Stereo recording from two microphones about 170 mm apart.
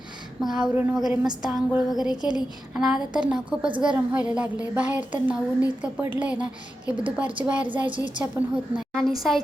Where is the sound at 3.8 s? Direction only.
10° right (ahead or behind).